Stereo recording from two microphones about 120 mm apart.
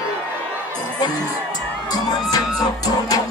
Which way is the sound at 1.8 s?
30° left (ahead or behind).